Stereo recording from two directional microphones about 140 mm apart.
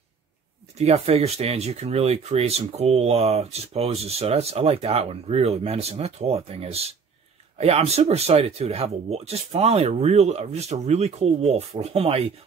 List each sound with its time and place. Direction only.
0.7 s speech: 50° right (ahead or behind)